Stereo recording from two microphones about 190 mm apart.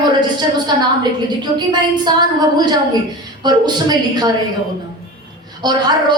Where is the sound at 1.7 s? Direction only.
20° right (ahead or behind).